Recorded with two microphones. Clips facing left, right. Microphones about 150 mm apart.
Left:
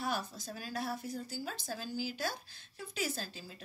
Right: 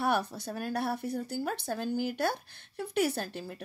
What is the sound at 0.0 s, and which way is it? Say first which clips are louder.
Speech: right 8 dB; 65° right (ahead or behind).